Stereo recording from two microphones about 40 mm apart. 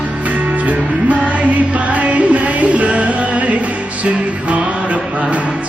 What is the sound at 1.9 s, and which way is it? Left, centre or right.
Music, right.